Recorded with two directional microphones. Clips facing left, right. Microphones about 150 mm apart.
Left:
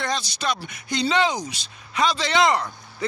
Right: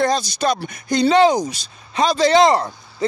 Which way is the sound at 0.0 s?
40° right (ahead or behind).